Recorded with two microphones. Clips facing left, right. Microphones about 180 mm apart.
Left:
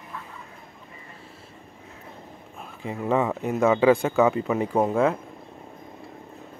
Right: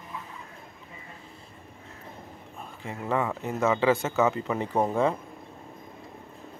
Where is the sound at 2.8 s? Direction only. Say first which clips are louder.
Left 5 dB; 20° left (ahead or behind).